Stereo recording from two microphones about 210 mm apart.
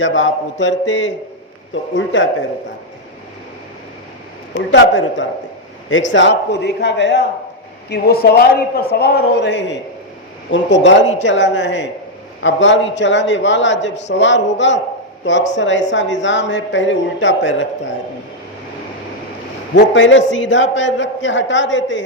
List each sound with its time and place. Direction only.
0.0 s a man's voice: 65° left (ahead or behind)
4.7 s a man's voice: 65° left (ahead or behind)
19.7 s a man's voice: 60° left (ahead or behind)